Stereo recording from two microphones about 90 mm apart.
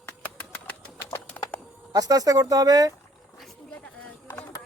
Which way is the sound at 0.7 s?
20° left (ahead or behind).